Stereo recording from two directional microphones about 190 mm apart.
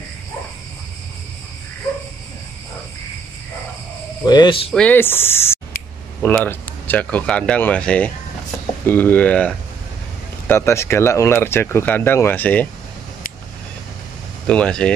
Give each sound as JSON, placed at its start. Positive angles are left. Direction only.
{"t": 4.3, "sound": "speech", "side_deg": 25}
{"t": 4.6, "sound": "speech", "side_deg": 5}
{"t": 10.5, "sound": "speech", "side_deg": 15}
{"t": 14.5, "sound": "speech", "side_deg": 5}